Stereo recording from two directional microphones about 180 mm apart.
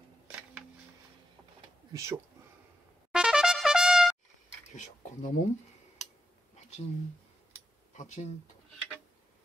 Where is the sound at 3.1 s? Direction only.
5° right (ahead or behind).